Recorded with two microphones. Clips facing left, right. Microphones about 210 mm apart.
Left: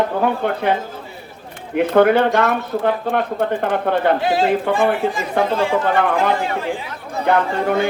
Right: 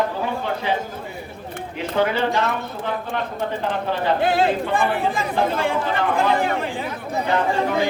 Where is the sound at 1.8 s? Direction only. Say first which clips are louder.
Left 8 dB; 55° left (ahead or behind).